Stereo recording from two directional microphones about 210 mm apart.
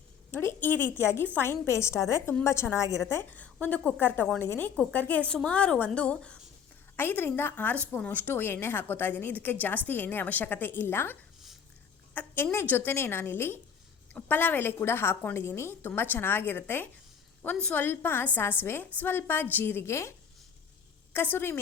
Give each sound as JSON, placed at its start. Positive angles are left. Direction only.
{"t": 0.3, "sound": "a woman's voice", "side_deg": 10}